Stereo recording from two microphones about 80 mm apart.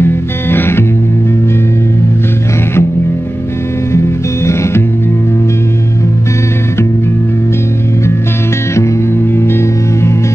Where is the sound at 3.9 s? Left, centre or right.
Left.